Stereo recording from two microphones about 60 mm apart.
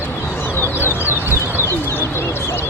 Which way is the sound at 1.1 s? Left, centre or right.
Right.